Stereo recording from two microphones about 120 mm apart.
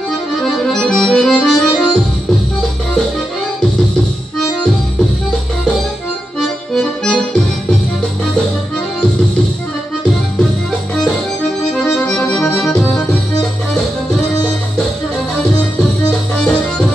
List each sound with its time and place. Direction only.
0.4 s accordion: 5° left (ahead or behind)
6.7 s accordion: 5° left (ahead or behind)
11.7 s accordion: 5° left (ahead or behind)
12.4 s accordion: 20° left (ahead or behind)
16.1 s music: 5° left (ahead or behind)